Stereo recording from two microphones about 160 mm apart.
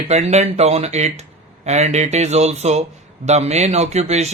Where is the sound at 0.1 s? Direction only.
45° right (ahead or behind).